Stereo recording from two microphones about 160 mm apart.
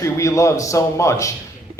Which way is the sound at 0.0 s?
20° left (ahead or behind).